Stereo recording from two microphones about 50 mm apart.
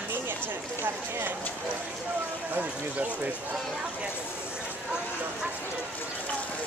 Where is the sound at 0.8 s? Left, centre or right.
Right.